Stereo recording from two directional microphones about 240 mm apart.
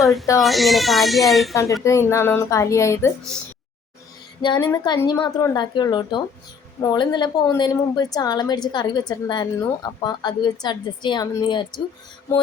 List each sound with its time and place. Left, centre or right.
0.0 s speech: centre
1.8 s a woman's voice: centre
4.4 s a woman's voice: centre